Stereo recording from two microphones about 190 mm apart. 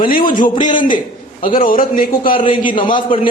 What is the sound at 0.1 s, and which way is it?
Speech, 45° left (ahead or behind).